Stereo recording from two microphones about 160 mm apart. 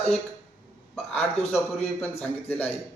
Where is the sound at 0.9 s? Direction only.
Centre (ahead or behind).